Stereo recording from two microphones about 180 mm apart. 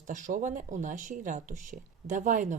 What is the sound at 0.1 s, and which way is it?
Speech, 45° right (ahead or behind).